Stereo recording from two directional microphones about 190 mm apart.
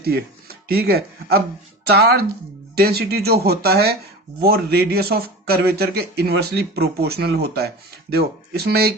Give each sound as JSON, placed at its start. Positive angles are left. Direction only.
{"t": 0.0, "sound": "a man's voice", "side_deg": -55}